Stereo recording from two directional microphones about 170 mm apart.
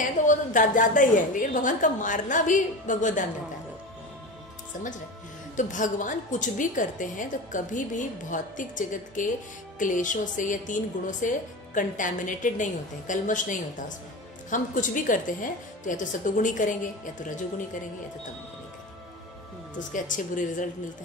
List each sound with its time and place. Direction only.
0.3 s a woman's voice: 50° left (ahead or behind)
5.6 s a woman's voice: 50° left (ahead or behind)
19.9 s a woman's voice: 50° left (ahead or behind)